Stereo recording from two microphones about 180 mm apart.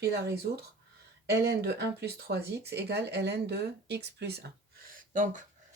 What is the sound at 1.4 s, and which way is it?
Speech, 65° right (ahead or behind).